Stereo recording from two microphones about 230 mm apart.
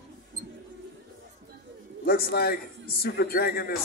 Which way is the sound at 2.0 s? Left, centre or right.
Left.